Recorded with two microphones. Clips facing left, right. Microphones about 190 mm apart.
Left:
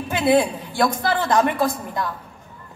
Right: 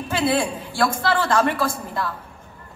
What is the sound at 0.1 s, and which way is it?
A woman's voice, 20° left (ahead or behind).